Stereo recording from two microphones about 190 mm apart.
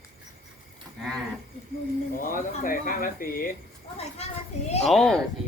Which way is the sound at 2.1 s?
45° left (ahead or behind).